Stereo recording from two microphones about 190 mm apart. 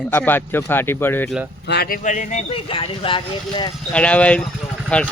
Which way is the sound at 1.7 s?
55° left (ahead or behind).